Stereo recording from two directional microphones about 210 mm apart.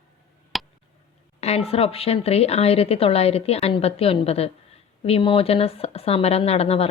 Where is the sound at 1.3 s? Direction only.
30° left (ahead or behind).